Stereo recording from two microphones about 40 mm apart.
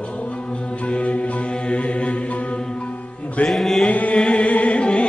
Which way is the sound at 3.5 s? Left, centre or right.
Centre.